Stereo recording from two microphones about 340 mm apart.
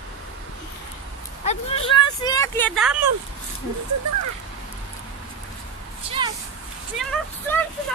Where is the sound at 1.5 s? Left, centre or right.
Centre.